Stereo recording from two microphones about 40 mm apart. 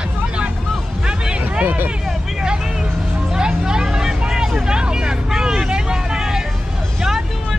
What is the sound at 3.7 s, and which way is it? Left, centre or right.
Vehicle, centre.